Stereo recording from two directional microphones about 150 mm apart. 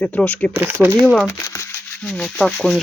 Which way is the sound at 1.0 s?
Centre (ahead or behind).